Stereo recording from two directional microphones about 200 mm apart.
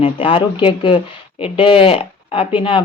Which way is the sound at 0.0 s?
25° left (ahead or behind).